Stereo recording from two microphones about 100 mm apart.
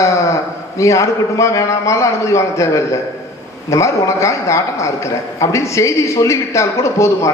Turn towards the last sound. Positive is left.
turn(degrees=30)  # may be behind; listen again after turning